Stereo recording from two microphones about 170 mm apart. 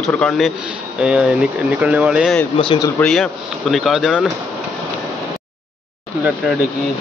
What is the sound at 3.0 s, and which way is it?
Speech, centre (ahead or behind).